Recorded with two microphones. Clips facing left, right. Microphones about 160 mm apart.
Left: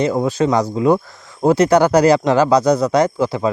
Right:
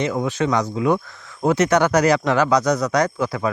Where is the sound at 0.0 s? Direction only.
35° left (ahead or behind).